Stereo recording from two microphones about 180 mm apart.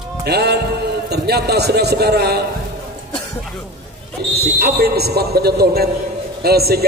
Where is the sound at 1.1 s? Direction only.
65° right (ahead or behind).